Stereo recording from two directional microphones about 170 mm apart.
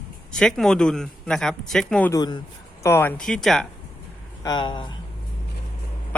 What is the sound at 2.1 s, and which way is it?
Speech, 25° left (ahead or behind).